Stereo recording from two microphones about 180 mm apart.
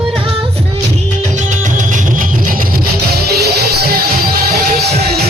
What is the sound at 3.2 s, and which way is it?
Music, 60° right (ahead or behind).